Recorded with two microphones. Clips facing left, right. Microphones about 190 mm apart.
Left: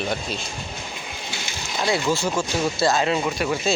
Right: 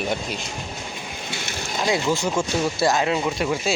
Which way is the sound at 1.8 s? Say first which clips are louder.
Even; 15° right (ahead or behind).